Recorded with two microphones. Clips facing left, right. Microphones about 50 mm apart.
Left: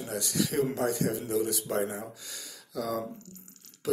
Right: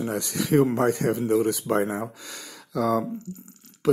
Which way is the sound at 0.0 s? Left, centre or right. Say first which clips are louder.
Right 4 dB; right.